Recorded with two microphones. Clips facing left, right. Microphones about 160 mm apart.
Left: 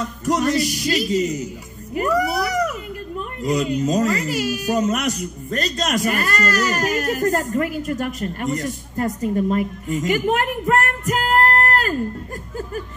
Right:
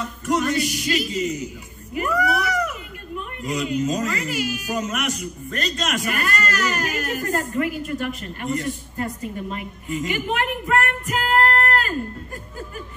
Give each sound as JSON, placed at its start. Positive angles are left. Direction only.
{"t": 0.0, "sound": "speech", "side_deg": 40}